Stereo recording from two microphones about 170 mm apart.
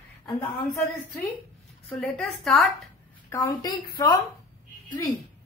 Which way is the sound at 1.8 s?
5° left (ahead or behind).